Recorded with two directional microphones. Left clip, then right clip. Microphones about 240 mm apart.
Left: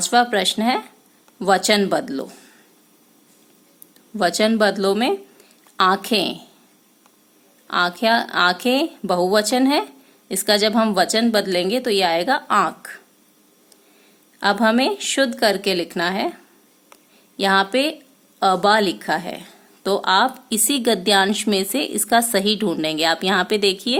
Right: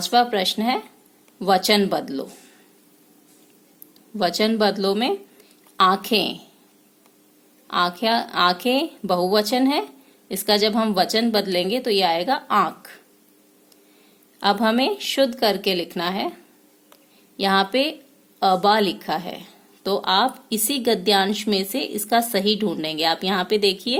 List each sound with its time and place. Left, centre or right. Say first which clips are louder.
0.0 s a woman's voice: left 2 dB; centre
4.2 s a woman's voice: left 3 dB; centre
7.7 s a woman's voice: left 3 dB; centre
14.3 s a woman's voice: left 2 dB; centre
16.9 s a sound: left 3 dB; centre
18.3 s a woman's voice: left 1 dB; centre